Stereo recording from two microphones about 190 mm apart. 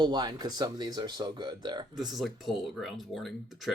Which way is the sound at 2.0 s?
Centre (ahead or behind).